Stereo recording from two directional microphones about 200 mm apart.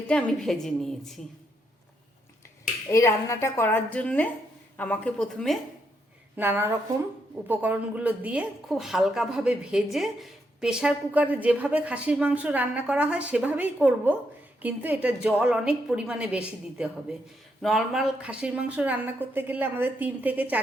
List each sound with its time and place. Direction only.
0.1 s a woman's voice: centre (ahead or behind)
2.9 s a woman's voice: 15° left (ahead or behind)
6.3 s a woman's voice: 10° right (ahead or behind)